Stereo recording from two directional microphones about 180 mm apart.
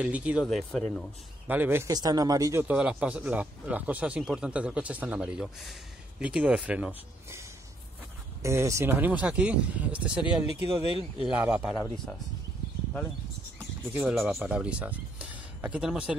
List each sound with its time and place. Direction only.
0.0 s speech: 5° right (ahead or behind)
1.5 s a man's voice: 10° right (ahead or behind)
2.7 s speech: 5° right (ahead or behind)
10.2 s speech: 30° left (ahead or behind)
11.2 s speech: 5° right (ahead or behind)
11.7 s a man's voice: 15° left (ahead or behind)
13.6 s a sound: 10° right (ahead or behind)
14.1 s speech: centre (ahead or behind)